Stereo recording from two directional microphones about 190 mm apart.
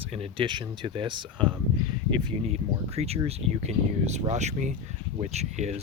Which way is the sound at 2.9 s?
35° right (ahead or behind).